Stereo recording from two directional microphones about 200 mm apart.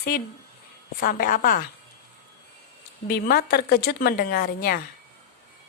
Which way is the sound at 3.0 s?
50° left (ahead or behind).